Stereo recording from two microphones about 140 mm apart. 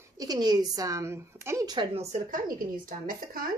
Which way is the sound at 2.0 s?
60° right (ahead or behind).